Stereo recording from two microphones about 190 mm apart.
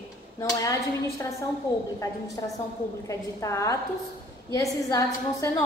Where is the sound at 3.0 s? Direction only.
15° left (ahead or behind).